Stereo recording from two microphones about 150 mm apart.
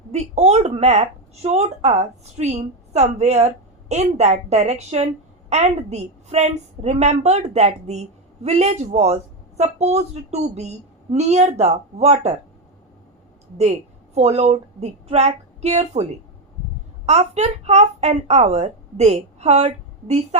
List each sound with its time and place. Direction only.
0.1 s speech: 45° right (ahead or behind)
14.2 s speech: 45° right (ahead or behind)
17.1 s speech: 45° right (ahead or behind)